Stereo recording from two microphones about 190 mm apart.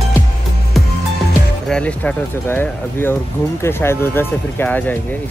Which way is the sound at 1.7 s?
5° left (ahead or behind).